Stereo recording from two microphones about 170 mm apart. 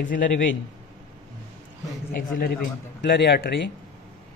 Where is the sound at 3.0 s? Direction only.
90° left.